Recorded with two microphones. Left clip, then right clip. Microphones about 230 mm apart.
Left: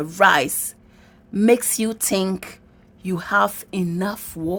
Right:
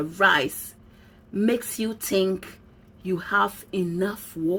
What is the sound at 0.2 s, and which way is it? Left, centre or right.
Speech, left.